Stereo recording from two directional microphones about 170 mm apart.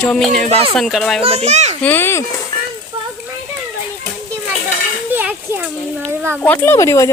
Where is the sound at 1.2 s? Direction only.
40° right (ahead or behind).